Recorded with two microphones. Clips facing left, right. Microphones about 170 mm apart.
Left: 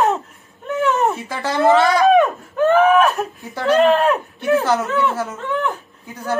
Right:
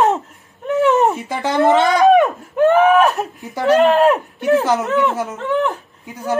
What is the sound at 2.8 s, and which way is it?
Whimper, 20° right (ahead or behind).